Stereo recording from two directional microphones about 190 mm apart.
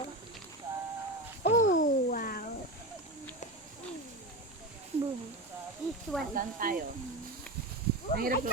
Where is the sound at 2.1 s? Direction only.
45° left (ahead or behind).